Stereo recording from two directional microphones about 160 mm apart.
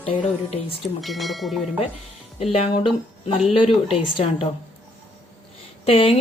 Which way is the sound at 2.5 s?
35° left (ahead or behind).